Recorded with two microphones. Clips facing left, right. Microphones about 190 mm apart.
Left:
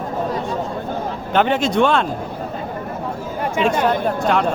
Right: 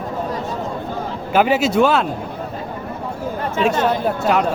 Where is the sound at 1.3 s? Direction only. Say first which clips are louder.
Right 2 dB; 5° right (ahead or behind).